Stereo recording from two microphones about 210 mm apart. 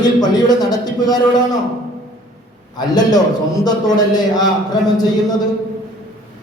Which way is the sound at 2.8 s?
20° left (ahead or behind).